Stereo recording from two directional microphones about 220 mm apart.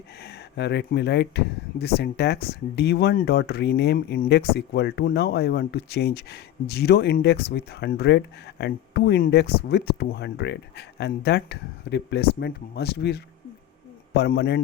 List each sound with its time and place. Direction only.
0.2 s speech: 50° left (ahead or behind)